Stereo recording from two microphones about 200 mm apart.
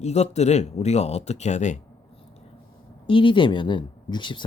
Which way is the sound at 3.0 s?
25° left (ahead or behind).